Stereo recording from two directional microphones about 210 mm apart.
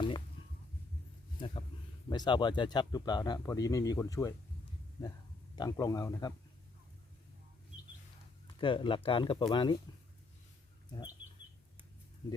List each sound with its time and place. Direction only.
1.4 s a sound: 25° left (ahead or behind)
2.0 s speech: 20° left (ahead or behind)
5.5 s speech: 15° left (ahead or behind)
8.6 s speech: 25° left (ahead or behind)